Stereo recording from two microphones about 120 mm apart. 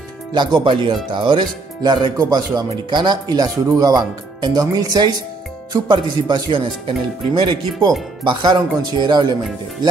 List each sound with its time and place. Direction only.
0.3 s speech: 40° right (ahead or behind)